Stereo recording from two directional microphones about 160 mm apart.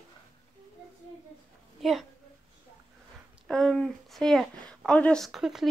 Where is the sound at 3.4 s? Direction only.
5° left (ahead or behind).